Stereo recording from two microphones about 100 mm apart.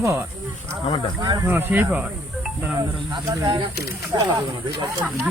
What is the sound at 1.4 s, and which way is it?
Speech, 20° right (ahead or behind).